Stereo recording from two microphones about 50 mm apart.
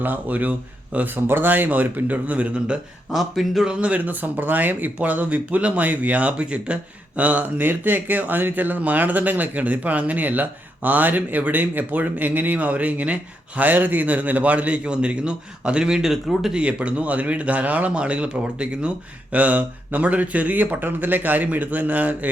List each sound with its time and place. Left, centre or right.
0.0 s speech: right
3.1 s speech: centre
3.7 s speech: right
16.6 s speech: right